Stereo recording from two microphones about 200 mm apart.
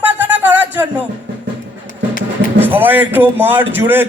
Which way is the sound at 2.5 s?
10° right (ahead or behind).